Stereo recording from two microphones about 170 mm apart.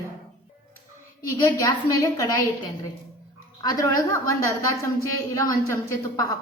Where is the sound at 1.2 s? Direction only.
20° left (ahead or behind).